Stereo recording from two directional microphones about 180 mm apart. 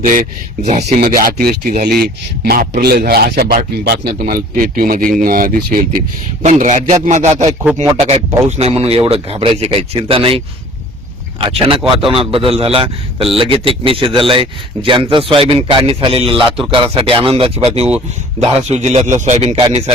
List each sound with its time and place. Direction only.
0.0 s a man's voice: 45° right (ahead or behind)